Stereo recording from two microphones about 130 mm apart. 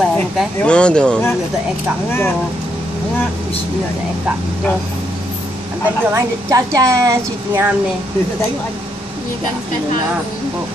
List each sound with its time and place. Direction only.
0.0 s speech: 5° left (ahead or behind)
6.0 s a woman's voice: 25° right (ahead or behind)